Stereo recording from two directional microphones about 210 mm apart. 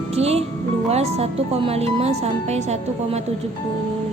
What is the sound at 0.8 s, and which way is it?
Speech, 30° right (ahead or behind).